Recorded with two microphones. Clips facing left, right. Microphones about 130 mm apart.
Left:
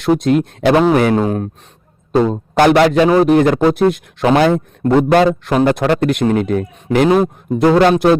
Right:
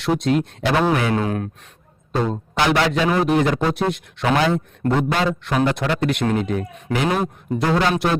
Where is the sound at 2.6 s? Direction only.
50° left (ahead or behind).